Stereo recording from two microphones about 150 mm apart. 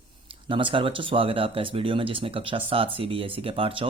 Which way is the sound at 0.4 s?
35° right (ahead or behind).